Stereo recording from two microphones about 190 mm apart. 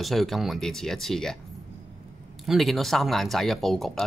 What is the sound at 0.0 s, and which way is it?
Speech, centre (ahead or behind).